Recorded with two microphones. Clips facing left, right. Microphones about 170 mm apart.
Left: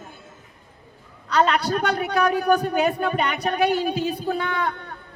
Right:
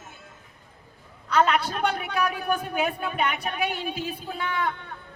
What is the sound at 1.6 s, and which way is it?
A woman's voice, 40° left (ahead or behind).